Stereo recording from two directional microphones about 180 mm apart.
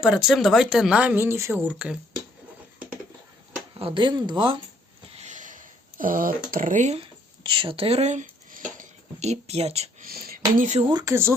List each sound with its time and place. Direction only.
0.0 s speech: 5° right (ahead or behind)
3.8 s speech: 30° right (ahead or behind)
5.1 s a sound: 40° right (ahead or behind)
7.4 s speech: 25° right (ahead or behind)
10.0 s speech: 55° right (ahead or behind)
10.7 s speech: 35° right (ahead or behind)
10.9 s speech: 15° right (ahead or behind)